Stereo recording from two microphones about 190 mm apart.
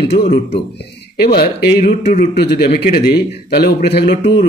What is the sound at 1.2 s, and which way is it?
Speech, 55° left (ahead or behind).